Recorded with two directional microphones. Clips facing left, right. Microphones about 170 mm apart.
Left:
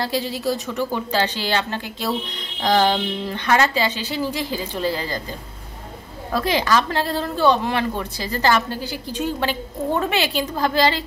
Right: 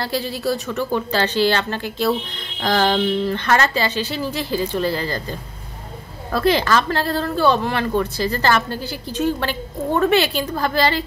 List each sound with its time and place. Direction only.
0.0 s a woman's voice: 15° left (ahead or behind)
6.3 s a woman's voice: 15° left (ahead or behind)